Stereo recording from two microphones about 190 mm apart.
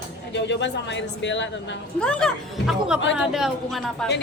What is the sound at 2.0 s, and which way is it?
A woman's voice, 5° left (ahead or behind).